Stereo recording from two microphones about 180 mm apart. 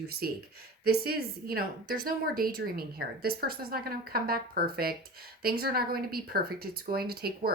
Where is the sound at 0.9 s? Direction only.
60° right (ahead or behind).